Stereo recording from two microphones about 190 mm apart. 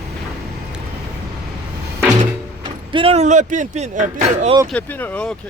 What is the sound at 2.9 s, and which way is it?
Speech, 30° right (ahead or behind).